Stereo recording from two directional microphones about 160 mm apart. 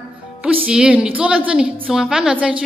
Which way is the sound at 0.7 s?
5° right (ahead or behind).